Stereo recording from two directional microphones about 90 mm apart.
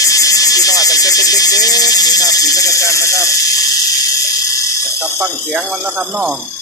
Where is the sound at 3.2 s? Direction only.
40° left (ahead or behind).